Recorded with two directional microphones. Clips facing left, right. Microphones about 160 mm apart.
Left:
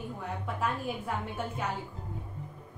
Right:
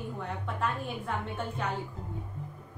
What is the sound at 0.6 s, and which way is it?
Speech, 5° left (ahead or behind).